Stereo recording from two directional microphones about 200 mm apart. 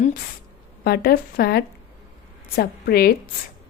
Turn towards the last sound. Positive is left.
turn(degrees=50)  # may be behind; listen again after turning